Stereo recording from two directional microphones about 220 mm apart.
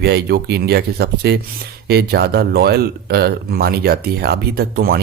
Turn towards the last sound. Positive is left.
turn(degrees=-45)  # may be behind; listen again after turning